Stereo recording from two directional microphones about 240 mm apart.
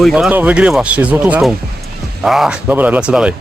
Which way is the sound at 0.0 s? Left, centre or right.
Centre.